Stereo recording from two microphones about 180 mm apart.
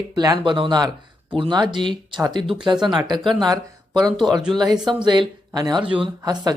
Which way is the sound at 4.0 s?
25° right (ahead or behind).